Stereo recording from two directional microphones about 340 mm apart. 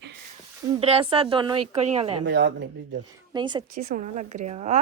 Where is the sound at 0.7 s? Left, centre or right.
Centre.